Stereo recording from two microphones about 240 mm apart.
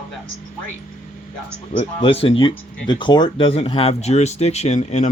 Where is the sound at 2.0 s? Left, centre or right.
Left.